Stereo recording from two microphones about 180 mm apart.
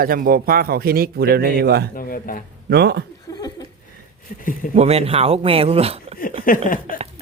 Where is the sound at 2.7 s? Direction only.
65° right (ahead or behind).